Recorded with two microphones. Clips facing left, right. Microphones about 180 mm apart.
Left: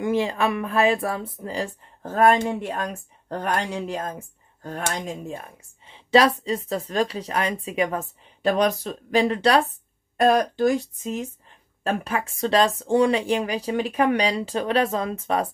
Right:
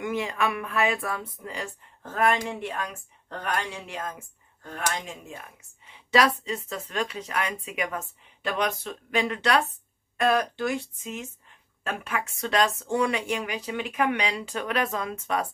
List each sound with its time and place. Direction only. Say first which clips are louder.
0.0 s a woman's voice: left 5 dB; 30° left (ahead or behind)